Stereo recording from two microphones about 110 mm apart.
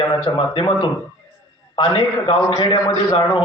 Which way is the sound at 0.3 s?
45° left (ahead or behind).